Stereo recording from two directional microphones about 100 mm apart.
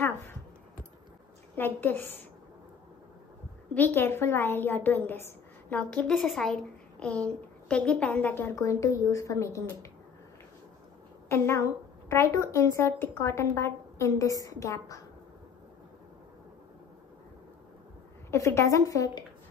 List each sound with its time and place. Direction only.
1.5 s a woman's voice: 20° left (ahead or behind)
3.7 s a woman's voice: 20° left (ahead or behind)
8.5 s a woman's voice: 30° left (ahead or behind)
11.2 s a woman's voice: 25° left (ahead or behind)
18.3 s a woman's voice: 30° left (ahead or behind)